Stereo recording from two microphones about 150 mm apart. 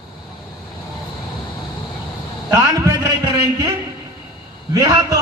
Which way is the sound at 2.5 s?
20° right (ahead or behind).